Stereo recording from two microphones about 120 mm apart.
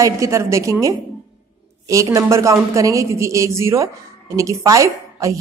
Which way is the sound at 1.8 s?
25° right (ahead or behind).